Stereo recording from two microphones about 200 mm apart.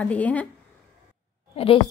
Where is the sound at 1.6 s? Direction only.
30° left (ahead or behind).